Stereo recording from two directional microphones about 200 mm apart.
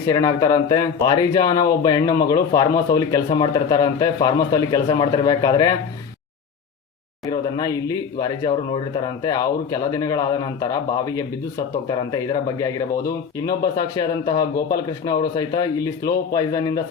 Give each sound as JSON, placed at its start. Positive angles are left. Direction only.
{"t": 0.1, "sound": "speech", "side_deg": 20}
{"t": 7.3, "sound": "speech", "side_deg": 20}